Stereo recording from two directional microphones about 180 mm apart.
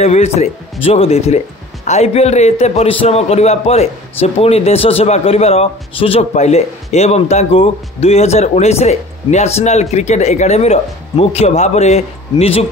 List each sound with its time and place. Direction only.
0.0 s a man's voice: 35° left (ahead or behind)